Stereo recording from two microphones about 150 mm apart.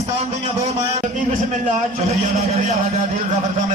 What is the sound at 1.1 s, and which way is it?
A man's voice, 60° right (ahead or behind).